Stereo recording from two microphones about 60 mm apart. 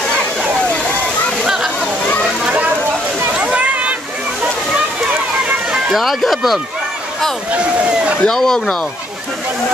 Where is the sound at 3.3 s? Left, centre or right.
Right.